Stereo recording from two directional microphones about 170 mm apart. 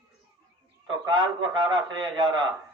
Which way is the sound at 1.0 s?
25° right (ahead or behind).